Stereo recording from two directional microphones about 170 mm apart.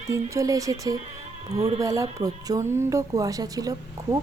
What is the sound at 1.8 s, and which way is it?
Speech, 20° right (ahead or behind).